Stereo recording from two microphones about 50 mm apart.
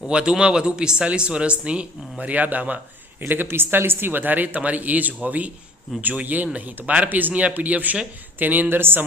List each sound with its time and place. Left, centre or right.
0.1 s speech: centre
3.2 s speech: right